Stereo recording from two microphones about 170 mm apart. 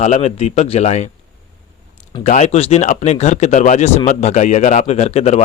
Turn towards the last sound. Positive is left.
turn(degrees=40)  # may be behind; listen again after turning